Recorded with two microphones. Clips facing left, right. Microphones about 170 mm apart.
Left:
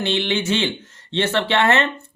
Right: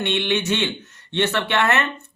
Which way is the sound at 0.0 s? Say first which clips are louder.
Left 1 dB; 30° left (ahead or behind).